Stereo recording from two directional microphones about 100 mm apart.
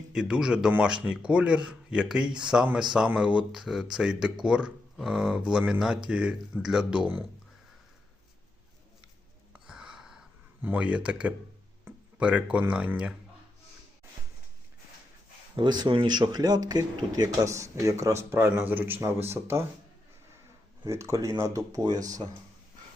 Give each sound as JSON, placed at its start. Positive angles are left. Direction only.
{"t": 0.1, "sound": "speech", "side_deg": -5}
{"t": 9.5, "sound": "a sound", "side_deg": -5}
{"t": 10.6, "sound": "speech", "side_deg": -15}
{"t": 15.5, "sound": "speech", "side_deg": -45}
{"t": 20.8, "sound": "speech", "side_deg": -30}